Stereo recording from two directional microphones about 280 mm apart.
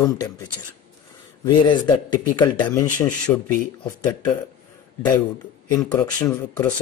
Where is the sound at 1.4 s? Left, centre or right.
Centre.